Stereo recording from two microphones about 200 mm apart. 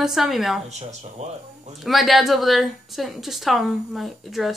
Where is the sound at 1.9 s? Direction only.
Centre (ahead or behind).